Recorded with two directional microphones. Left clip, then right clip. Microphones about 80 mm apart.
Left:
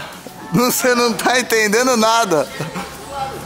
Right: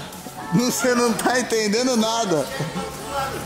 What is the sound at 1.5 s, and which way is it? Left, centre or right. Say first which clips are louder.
Speech: left 6 dB; left.